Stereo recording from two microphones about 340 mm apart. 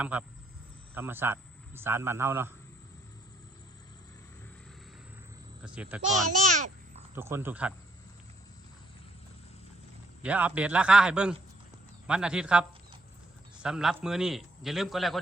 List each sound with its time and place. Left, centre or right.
0.0 s a man's voice: centre
5.6 s a man's voice: centre
6.1 s a child's voice: right
7.2 s speech: centre
10.2 s a man's voice: centre